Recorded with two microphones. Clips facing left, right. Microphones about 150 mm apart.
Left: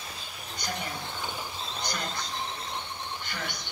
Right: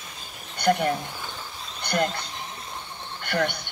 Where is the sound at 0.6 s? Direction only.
65° right (ahead or behind).